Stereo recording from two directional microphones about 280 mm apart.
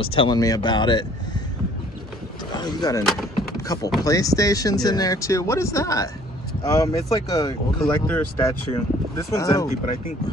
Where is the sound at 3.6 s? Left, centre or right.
Centre.